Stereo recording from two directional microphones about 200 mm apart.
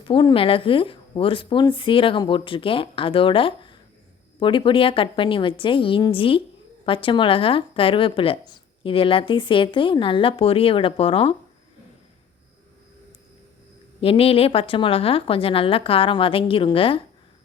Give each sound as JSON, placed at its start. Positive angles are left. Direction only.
{"t": 0.0, "sound": "speech", "side_deg": 25}
{"t": 14.0, "sound": "speech", "side_deg": 30}